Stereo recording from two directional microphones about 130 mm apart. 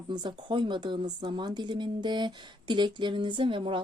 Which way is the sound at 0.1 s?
35° right (ahead or behind).